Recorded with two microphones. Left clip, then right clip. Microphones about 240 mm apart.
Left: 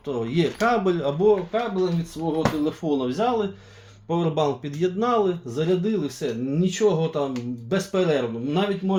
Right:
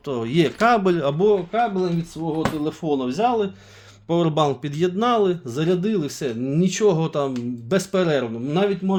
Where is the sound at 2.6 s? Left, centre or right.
Right.